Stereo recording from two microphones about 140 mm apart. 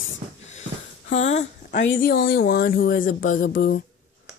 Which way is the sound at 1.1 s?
55° left (ahead or behind).